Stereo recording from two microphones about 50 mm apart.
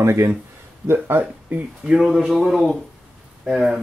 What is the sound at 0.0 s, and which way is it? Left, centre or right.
Speech, right.